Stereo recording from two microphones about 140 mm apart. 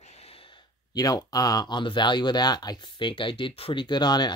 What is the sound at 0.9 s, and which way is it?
Speech, 25° left (ahead or behind).